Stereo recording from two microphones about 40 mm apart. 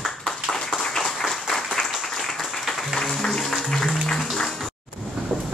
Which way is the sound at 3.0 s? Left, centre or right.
Centre.